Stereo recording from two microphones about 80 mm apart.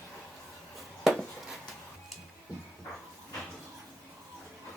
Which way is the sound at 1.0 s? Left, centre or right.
Centre.